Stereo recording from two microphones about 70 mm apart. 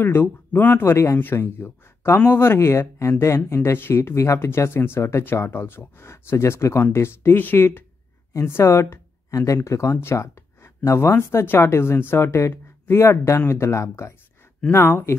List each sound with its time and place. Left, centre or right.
0.0 s speech: left
10.2 s a sound: left
11.1 s speech: left